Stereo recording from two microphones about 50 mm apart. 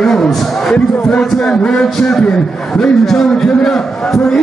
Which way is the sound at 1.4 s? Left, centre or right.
Centre.